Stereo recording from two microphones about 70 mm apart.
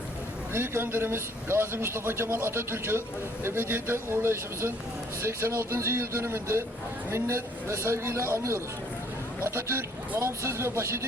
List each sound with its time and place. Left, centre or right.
0.5 s speech: right